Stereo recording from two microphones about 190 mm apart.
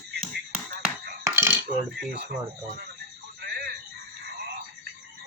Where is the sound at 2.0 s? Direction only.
55° right (ahead or behind).